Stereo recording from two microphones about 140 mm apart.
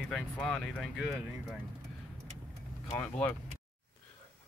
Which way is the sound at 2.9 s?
15° left (ahead or behind).